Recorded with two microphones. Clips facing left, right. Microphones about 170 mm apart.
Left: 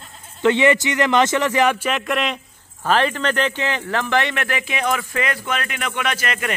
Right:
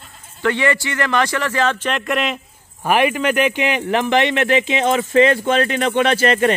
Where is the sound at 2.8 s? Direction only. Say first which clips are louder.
Right 3 dB; 15° right (ahead or behind).